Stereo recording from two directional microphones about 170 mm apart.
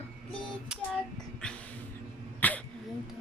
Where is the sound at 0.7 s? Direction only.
5° right (ahead or behind).